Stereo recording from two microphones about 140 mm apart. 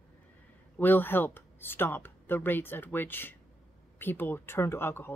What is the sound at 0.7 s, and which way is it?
Speech, 15° left (ahead or behind).